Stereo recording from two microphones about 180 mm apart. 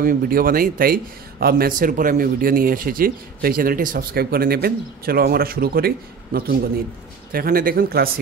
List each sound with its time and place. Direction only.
0.0 s speech: 50° right (ahead or behind)